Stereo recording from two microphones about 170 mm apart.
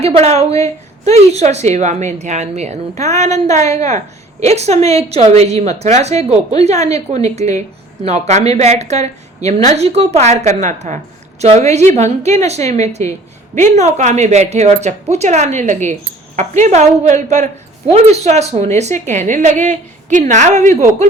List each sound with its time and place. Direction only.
0.0 s a woman's voice: 40° right (ahead or behind)